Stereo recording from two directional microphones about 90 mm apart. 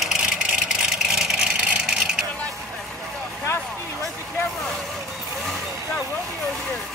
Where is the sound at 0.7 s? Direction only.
5° right (ahead or behind).